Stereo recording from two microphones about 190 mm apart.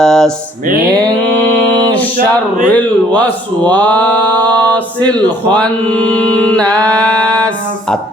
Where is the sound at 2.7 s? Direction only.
10° left (ahead or behind).